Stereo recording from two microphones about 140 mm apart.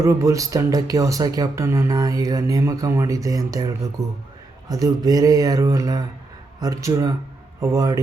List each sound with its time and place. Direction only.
0.0 s speech: 20° right (ahead or behind)